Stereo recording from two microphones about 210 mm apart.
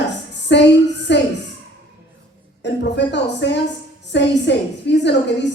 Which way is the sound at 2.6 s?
55° left (ahead or behind).